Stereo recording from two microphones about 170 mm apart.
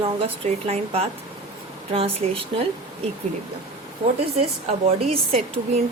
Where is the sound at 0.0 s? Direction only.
35° right (ahead or behind).